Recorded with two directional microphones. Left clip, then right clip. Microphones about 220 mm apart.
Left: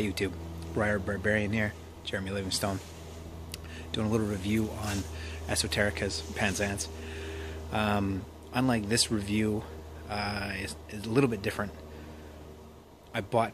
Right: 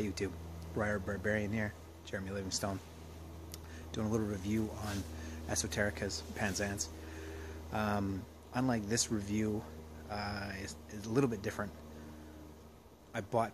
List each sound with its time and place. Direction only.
0.0 s speech: centre (ahead or behind)
13.1 s speech: 5° right (ahead or behind)